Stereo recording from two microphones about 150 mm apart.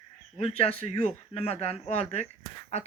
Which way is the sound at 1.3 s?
40° left (ahead or behind).